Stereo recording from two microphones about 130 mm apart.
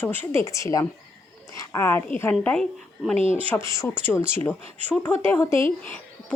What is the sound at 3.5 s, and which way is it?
Speech, 20° left (ahead or behind).